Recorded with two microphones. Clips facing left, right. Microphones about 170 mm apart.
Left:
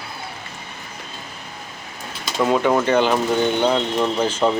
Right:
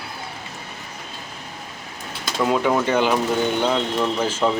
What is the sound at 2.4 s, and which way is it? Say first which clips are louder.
Speech: left 2 dB; centre (ahead or behind).